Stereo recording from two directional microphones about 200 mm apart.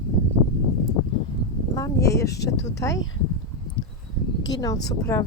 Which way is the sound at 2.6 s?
15° left (ahead or behind).